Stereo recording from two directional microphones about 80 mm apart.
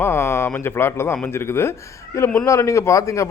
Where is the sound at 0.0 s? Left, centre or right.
Left.